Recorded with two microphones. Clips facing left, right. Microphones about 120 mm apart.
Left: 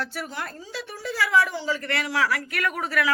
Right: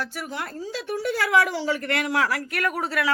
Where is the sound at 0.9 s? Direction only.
65° right (ahead or behind).